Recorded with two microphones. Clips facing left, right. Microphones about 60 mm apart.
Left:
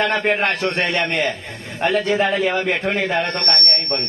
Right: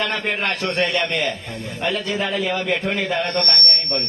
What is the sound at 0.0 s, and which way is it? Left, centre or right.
A man's voice, left.